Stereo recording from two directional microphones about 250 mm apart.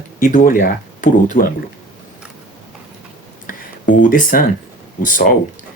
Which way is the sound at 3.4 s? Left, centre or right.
Left.